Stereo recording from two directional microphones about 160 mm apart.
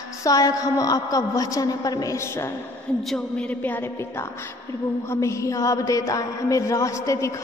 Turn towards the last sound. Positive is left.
turn(degrees=20)  # may be behind; listen again after turning